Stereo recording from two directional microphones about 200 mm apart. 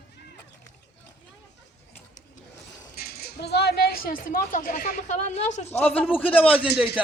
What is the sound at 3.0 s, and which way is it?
Speech, 50° left (ahead or behind).